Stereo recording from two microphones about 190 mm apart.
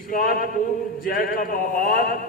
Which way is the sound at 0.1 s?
50° left (ahead or behind).